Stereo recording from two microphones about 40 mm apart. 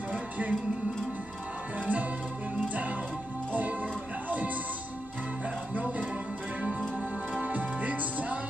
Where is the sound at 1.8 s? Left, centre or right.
Right.